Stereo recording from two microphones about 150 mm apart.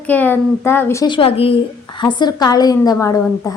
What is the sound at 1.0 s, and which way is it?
A woman's voice, 35° left (ahead or behind).